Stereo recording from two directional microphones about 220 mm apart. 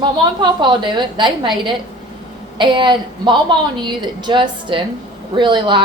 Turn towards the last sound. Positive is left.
turn(degrees=-20)  # may be behind; listen again after turning